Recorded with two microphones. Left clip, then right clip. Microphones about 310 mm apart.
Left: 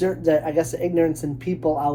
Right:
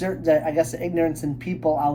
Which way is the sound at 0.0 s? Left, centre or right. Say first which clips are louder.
Left 1 dB; centre.